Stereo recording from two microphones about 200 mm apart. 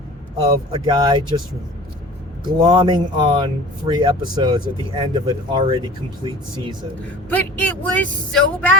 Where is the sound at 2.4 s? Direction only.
20° right (ahead or behind).